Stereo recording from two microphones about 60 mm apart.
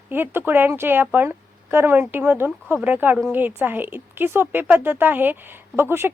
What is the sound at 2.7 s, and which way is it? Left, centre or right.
Speech, right.